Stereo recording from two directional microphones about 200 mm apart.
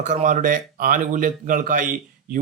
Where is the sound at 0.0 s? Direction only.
40° right (ahead or behind).